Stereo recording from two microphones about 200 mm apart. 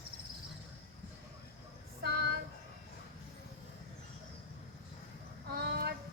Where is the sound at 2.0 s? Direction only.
55° right (ahead or behind).